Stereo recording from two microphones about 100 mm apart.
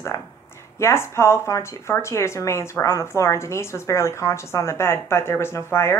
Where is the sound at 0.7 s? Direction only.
25° left (ahead or behind).